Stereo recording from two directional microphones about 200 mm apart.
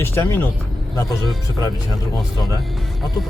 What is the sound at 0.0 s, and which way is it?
Speech, 10° left (ahead or behind).